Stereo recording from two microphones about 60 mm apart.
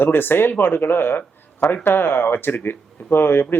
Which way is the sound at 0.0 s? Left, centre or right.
Left.